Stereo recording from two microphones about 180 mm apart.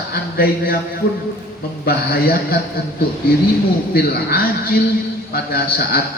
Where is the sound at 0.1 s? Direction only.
55° left (ahead or behind).